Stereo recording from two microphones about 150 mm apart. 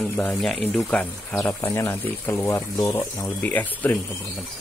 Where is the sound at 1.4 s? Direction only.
20° left (ahead or behind).